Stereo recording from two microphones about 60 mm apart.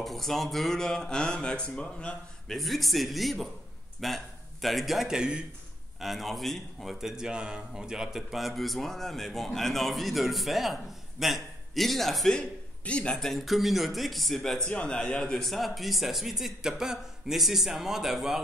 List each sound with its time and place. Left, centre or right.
0.0 s speech: centre
2.4 s a man's voice: centre
5.9 s a man's voice: centre
12.4 s a man's voice: centre
13.2 s a man's voice: centre
14.7 s speech: centre
15.4 s a man's voice: centre